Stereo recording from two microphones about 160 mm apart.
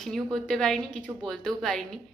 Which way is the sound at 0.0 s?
5° left (ahead or behind).